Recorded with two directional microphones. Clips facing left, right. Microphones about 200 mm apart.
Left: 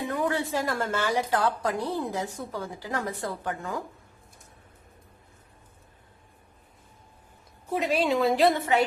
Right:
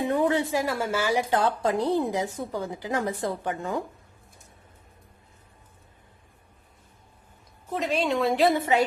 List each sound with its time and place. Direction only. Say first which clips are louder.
0.1 s a sound: right 4 dB; 25° right (ahead or behind)
0.5 s a woman's voice: right 2 dB; 10° right (ahead or behind)
1.3 s a woman's voice: right 2 dB; 25° right (ahead or behind)
7.7 s a woman's voice: left 1 dB; 5° left (ahead or behind)